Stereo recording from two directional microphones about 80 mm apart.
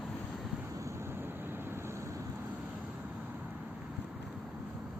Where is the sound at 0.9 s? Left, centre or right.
Right.